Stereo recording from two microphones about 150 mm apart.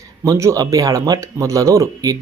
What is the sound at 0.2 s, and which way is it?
Speech, 20° right (ahead or behind).